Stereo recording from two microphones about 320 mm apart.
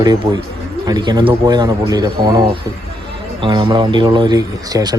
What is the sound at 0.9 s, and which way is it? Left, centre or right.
Speech, centre.